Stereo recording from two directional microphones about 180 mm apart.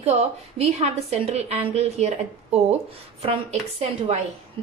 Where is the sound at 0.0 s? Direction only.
35° right (ahead or behind).